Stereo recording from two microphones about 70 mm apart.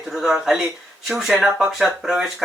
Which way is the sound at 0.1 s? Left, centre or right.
Centre.